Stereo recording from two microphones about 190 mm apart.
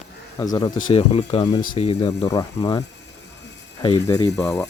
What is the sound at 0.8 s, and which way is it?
Speech, 30° left (ahead or behind).